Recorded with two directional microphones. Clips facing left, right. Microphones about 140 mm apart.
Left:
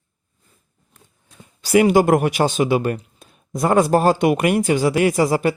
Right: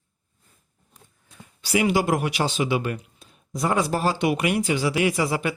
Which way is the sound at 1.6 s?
50° left (ahead or behind).